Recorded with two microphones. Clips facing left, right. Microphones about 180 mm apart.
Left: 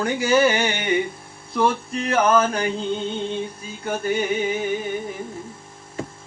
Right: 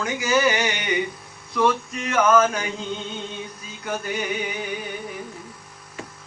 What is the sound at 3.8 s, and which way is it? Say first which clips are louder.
Music: left 4 dB; 25° left (ahead or behind).